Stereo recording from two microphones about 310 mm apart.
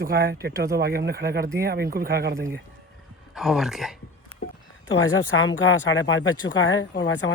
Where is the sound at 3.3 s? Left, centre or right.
Centre.